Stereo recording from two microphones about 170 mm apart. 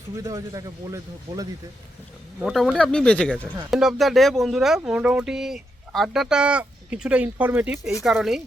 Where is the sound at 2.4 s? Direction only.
Centre (ahead or behind).